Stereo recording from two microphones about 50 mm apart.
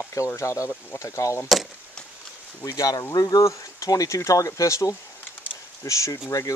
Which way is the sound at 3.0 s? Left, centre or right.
Left.